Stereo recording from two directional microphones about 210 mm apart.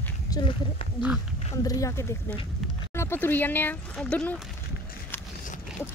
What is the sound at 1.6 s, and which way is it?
Speech, 15° left (ahead or behind).